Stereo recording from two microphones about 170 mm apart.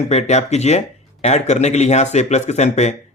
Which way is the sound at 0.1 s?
40° left (ahead or behind).